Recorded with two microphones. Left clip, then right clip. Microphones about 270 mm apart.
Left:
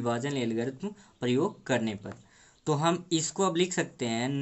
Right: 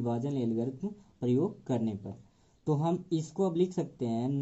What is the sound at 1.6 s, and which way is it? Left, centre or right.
Speech, centre.